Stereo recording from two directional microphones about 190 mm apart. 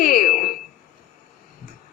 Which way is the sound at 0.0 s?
45° left (ahead or behind).